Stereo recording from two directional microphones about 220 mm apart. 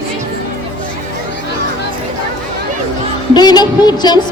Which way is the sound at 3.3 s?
20° left (ahead or behind).